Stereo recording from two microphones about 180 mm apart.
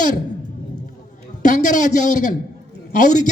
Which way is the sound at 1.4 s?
45° left (ahead or behind).